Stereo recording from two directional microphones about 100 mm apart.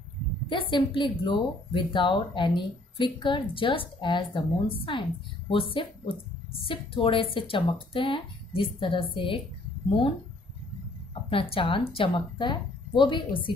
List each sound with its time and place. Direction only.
0.5 s speech: 55° left (ahead or behind)
11.2 s speech: 60° left (ahead or behind)